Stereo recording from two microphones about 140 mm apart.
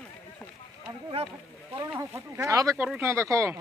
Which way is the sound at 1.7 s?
20° right (ahead or behind).